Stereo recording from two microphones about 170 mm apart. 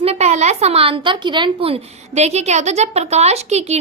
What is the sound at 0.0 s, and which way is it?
A woman's voice, 40° right (ahead or behind).